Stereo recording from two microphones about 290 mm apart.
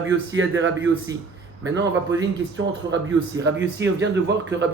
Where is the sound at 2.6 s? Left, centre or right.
Right.